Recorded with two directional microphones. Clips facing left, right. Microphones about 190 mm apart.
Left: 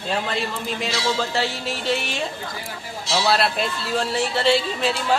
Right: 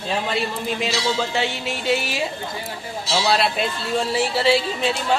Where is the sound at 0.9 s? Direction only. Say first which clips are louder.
Left 1 dB; 20° right (ahead or behind).